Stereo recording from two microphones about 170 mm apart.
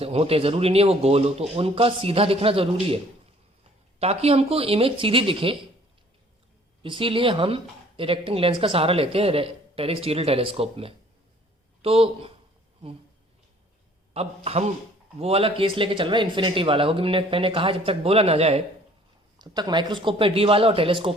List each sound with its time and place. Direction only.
0.0 s speech: 35° right (ahead or behind)
4.0 s speech: 35° right (ahead or behind)
6.8 s speech: 30° right (ahead or behind)
14.1 s speech: 35° right (ahead or behind)
19.4 s speech: 25° right (ahead or behind)